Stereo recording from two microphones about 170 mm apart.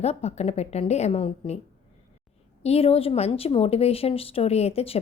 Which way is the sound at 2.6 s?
35° left (ahead or behind).